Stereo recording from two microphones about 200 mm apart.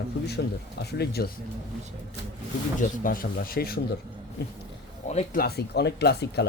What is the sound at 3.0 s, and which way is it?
Speech, 45° left (ahead or behind).